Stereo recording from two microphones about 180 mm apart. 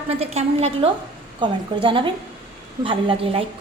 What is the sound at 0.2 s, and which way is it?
A woman's voice, 35° right (ahead or behind).